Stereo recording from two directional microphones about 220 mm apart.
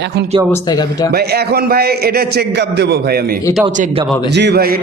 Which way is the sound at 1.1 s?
45° right (ahead or behind).